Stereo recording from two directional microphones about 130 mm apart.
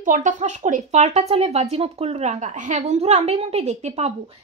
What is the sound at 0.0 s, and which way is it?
Speech, 80° right.